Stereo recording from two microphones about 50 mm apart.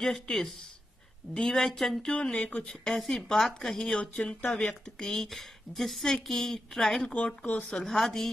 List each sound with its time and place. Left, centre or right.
0.0 s speech: centre
2.3 s speech: left
2.7 s speech: centre
7.2 s speech: left